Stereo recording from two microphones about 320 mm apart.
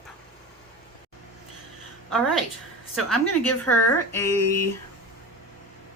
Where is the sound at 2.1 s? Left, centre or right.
Centre.